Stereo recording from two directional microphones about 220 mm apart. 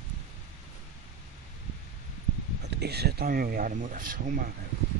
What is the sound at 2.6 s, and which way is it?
Speech, 50° right (ahead or behind).